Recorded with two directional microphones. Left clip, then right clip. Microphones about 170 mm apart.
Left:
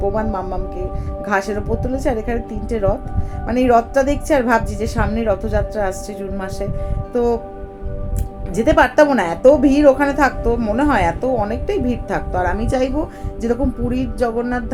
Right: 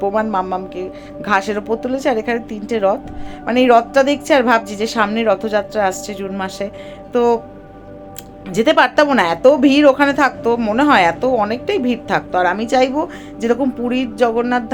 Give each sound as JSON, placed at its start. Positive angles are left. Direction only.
{"t": 0.0, "sound": "a woman's voice", "side_deg": -20}
{"t": 8.5, "sound": "a woman's voice", "side_deg": -20}